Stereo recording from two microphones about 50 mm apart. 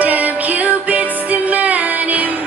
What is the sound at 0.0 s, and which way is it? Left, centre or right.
Music, right.